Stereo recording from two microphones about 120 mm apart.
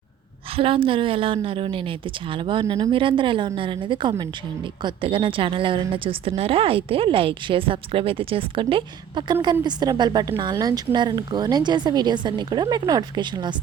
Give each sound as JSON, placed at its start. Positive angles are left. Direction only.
{"t": 0.5, "sound": "a woman's voice", "side_deg": -50}
{"t": 2.9, "sound": "a woman's voice", "side_deg": -45}